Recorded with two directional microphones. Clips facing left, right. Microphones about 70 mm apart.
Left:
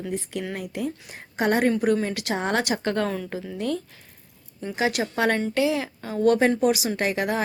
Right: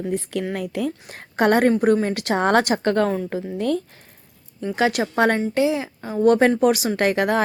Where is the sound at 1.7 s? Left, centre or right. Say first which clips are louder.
Right 4 dB; right.